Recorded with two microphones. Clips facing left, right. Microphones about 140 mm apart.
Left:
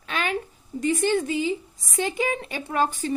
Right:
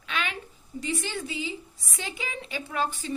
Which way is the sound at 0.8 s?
45° left (ahead or behind).